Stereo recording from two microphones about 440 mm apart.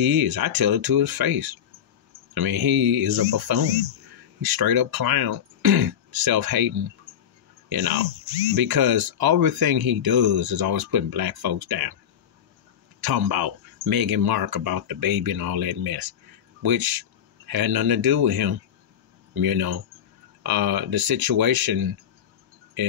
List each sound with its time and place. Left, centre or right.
0.0 s speech: right
7.7 s speech: right
13.0 s speech: right